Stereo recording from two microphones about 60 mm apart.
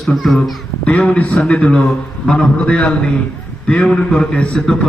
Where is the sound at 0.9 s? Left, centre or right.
Left.